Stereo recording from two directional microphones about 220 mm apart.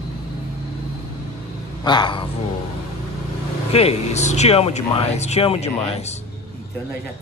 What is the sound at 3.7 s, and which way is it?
Speech, 30° left (ahead or behind).